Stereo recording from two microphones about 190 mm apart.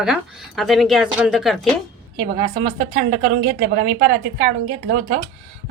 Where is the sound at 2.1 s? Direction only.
50° right (ahead or behind).